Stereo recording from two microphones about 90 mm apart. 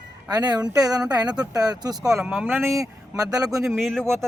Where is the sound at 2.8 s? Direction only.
40° right (ahead or behind).